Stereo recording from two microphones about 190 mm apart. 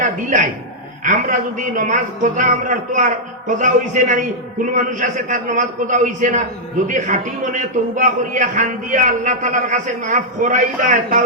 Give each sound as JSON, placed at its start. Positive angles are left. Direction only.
{"t": 0.0, "sound": "a man's voice", "side_deg": -40}